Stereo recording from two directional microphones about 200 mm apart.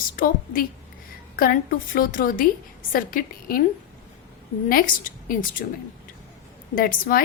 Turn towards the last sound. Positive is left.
turn(degrees=45)  # may be behind; listen again after turning